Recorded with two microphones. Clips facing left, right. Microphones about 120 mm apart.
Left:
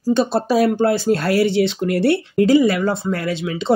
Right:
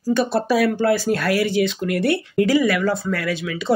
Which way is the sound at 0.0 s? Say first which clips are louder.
Left 2 dB; 25° left (ahead or behind).